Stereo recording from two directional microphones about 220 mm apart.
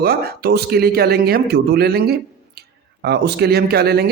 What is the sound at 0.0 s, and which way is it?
Speech, 45° right (ahead or behind).